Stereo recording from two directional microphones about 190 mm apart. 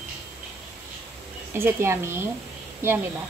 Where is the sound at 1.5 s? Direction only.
10° right (ahead or behind).